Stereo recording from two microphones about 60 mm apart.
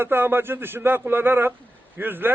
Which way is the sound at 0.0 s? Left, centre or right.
Right.